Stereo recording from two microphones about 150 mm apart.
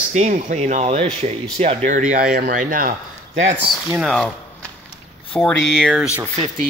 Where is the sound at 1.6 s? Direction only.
45° right (ahead or behind); by 2.9 s 65° right (ahead or behind).